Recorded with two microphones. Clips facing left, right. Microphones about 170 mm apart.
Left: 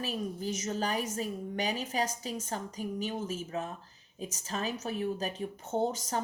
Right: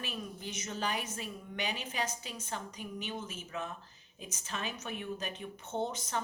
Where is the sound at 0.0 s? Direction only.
40° left (ahead or behind).